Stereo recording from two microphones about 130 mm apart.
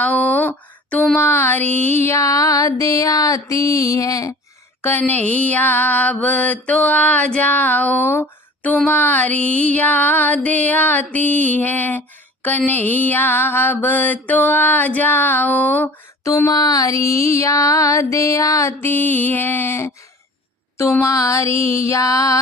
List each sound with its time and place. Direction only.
0.0 s a sound: 10° left (ahead or behind)
1.2 s mantra: 15° left (ahead or behind)
2.0 s music: 20° left (ahead or behind)
4.8 s mantra: 15° left (ahead or behind)
16.2 s music: 25° left (ahead or behind)
20.9 s music: 25° left (ahead or behind)